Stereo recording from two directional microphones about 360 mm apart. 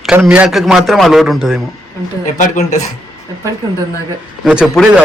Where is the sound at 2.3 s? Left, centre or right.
Left.